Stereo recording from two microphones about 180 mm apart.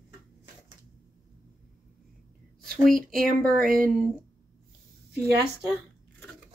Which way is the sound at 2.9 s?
50° right (ahead or behind).